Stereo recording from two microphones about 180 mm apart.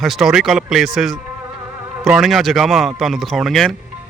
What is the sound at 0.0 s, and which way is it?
A man's voice, centre (ahead or behind).